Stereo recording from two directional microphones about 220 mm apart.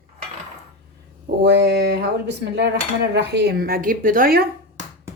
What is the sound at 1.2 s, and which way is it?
Speech, 50° right (ahead or behind).